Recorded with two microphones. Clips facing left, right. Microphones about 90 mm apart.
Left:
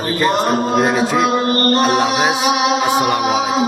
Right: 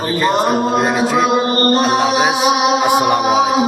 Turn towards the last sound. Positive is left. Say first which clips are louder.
# right 3 dB
turn(degrees=-5)  # may be behind; listen again after turning